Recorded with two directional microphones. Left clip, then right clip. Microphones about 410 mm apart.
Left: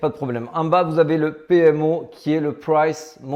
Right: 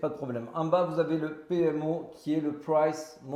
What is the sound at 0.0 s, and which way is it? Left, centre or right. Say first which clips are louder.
A man's voice: left 9 dB; left.